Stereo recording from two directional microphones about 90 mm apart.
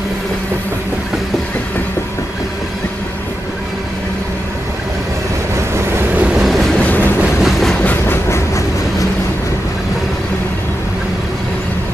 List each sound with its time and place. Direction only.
5.8 s vehicle: 25° right (ahead or behind)
6.4 s vehicle: centre (ahead or behind)
6.8 s train: 20° left (ahead or behind)